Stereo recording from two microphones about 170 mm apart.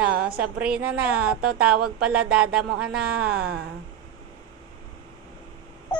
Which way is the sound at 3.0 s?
65° right (ahead or behind).